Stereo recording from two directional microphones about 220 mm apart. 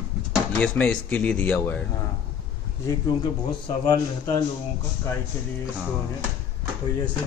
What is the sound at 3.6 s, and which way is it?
Speech, 15° left (ahead or behind).